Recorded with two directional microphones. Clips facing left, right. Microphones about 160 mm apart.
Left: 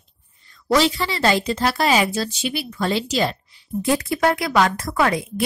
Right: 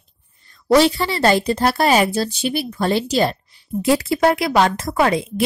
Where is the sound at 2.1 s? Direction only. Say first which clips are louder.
Right 3 dB; 30° right (ahead or behind).